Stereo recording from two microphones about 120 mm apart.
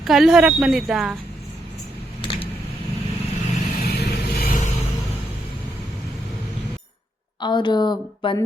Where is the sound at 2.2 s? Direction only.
50° left (ahead or behind).